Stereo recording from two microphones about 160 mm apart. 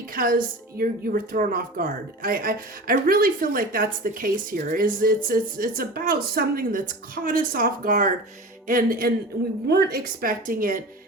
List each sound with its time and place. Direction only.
0.1 s a woman's voice: 65° right (ahead or behind)
9.6 s a woman's voice: 80° right; by 10.8 s 60° right (ahead or behind)